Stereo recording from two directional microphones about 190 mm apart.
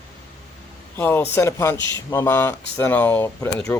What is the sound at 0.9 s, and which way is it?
Speech, 10° left (ahead or behind).